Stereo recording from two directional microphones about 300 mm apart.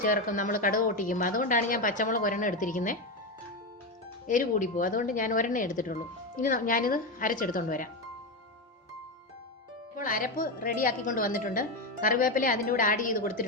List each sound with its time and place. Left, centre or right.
0.0 s speech: left
4.3 s speech: left
9.9 s speech: left